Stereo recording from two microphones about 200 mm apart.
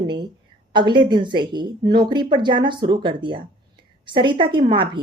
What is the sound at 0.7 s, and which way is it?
Speech, 25° right (ahead or behind).